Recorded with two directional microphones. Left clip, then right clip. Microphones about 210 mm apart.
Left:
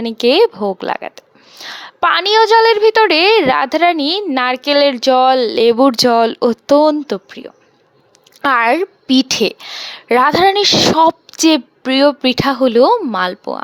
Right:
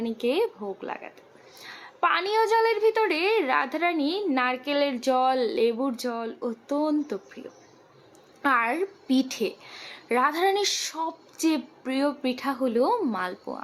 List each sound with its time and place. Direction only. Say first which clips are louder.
0.0 s a woman's voice: left 14 dB; 45° left (ahead or behind)